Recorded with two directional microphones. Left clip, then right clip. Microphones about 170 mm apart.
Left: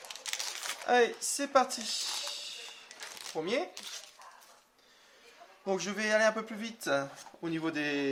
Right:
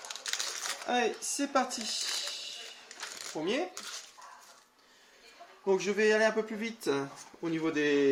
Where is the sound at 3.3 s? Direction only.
30° left (ahead or behind).